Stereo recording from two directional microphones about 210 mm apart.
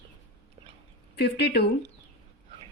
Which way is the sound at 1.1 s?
50° left (ahead or behind).